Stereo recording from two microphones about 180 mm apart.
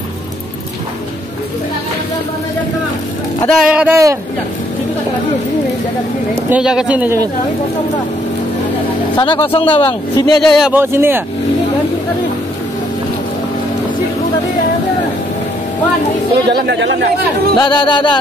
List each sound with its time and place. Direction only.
3.4 s speech: 5° right (ahead or behind)
6.5 s a woman's voice: 5° right (ahead or behind)
9.1 s speech: 25° left (ahead or behind)
10.4 s speech: centre (ahead or behind)
10.7 s a woman's voice: 15° right (ahead or behind)
16.5 s speech: 70° right (ahead or behind)
17.6 s speech: 25° left (ahead or behind)